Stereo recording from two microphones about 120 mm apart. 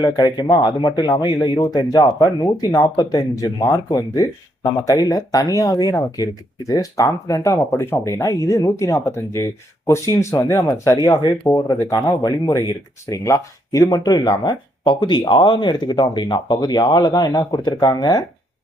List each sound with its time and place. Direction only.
0.0 s speech: 35° left (ahead or behind)